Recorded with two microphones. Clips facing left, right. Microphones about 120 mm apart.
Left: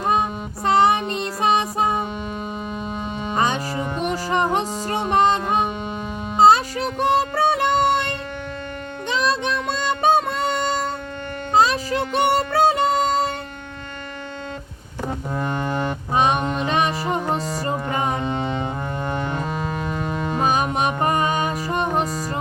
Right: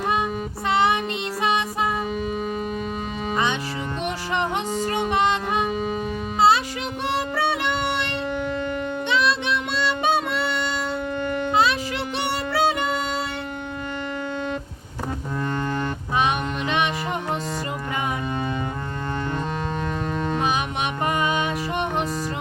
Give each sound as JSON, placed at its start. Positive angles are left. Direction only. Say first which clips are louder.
{"t": 0.1, "sound": "child singing", "louder": "left 5 dB", "side_deg": 40}
{"t": 1.4, "sound": "music", "louder": "left 4 dB", "side_deg": 40}
{"t": 3.3, "sound": "music", "louder": "left 4 dB", "side_deg": 40}
{"t": 9.0, "sound": "child singing", "louder": "left 2 dB", "side_deg": 40}
{"t": 11.5, "sound": "music", "louder": "left 6 dB", "side_deg": 40}
{"t": 15.4, "sound": "music", "louder": "left 1 dB", "side_deg": 15}
{"t": 16.1, "sound": "music", "louder": "left 4 dB", "side_deg": 35}
{"t": 20.1, "sound": "music", "louder": "right 1 dB", "side_deg": 5}
{"t": 20.4, "sound": "music", "louder": "left 4 dB", "side_deg": 40}